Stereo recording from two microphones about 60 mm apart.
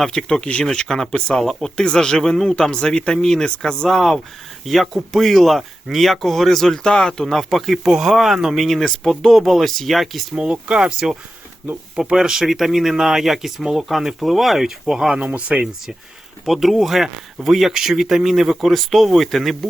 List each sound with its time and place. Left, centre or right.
0.0 s speech: centre
3.8 s speech: centre
7.6 s speech: centre
10.3 s speech: centre
15.4 s speech: right
16.5 s speech: centre